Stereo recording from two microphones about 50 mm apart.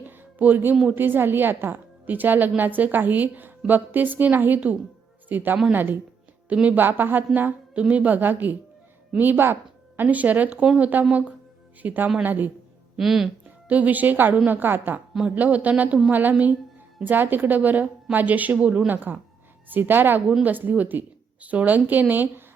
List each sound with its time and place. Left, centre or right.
0.0 s music: right
0.9 s a woman's voice: right
6.5 s speech: right
6.7 s a woman's voice: right
7.8 s a woman's voice: right
10.0 s a woman's voice: right
13.0 s speech: centre
13.7 s a woman's voice: right
15.4 s a woman's voice: right
18.9 s a woman's voice: right